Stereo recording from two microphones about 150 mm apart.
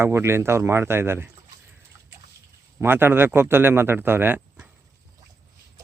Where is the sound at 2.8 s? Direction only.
15° right (ahead or behind).